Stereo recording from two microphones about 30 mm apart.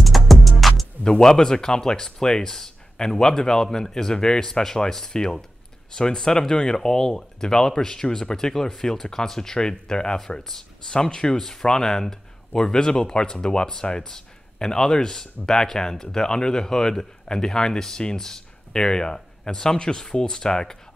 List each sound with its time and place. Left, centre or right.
0.0 s music: centre
1.0 s speech: centre